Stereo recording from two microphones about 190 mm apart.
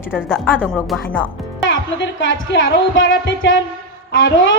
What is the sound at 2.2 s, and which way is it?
Music, 70° left (ahead or behind).